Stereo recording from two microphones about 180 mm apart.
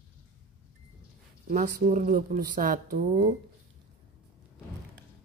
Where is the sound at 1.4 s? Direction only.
45° right (ahead or behind).